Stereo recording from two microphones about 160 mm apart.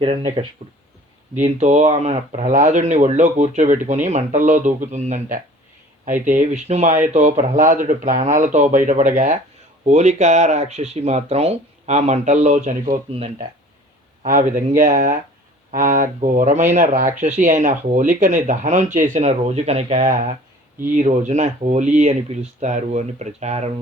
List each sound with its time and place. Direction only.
0.0 s speech: 35° right (ahead or behind)
1.4 s speech: 45° right (ahead or behind)
14.2 s speech: 55° right (ahead or behind); by 20.1 s 40° right (ahead or behind)
20.1 s speech: 55° right (ahead or behind)